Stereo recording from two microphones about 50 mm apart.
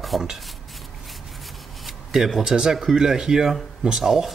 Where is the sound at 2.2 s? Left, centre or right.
Centre.